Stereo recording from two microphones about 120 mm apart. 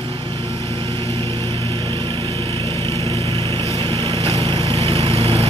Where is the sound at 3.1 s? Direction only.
50° right (ahead or behind).